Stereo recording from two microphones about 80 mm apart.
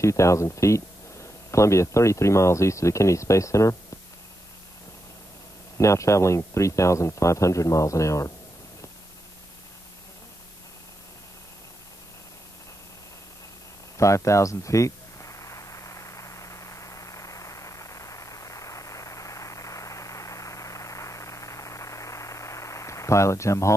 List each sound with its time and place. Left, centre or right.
0.0 s speech: left
5.8 s speech: left
13.9 s a sound: left